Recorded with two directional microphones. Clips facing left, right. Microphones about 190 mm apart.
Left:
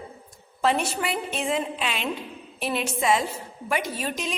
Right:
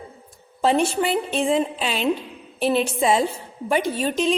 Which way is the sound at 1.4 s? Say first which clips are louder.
Right 4 dB; 30° right (ahead or behind).